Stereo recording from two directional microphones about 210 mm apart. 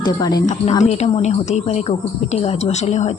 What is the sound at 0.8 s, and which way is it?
Speech, 30° left (ahead or behind).